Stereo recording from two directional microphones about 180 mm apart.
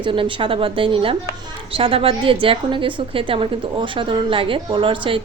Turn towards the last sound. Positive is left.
turn(degrees=-30)  # may be behind; listen again after turning